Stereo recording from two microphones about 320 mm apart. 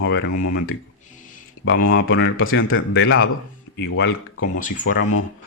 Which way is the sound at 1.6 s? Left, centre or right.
Left.